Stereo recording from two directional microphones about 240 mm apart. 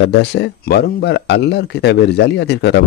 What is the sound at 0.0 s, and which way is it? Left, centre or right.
Speech, left.